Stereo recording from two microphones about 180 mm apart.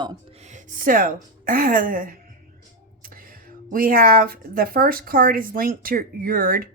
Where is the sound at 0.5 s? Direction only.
50° right (ahead or behind).